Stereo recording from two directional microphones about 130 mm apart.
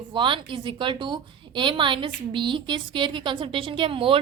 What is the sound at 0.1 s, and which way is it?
A woman's voice, 40° right (ahead or behind).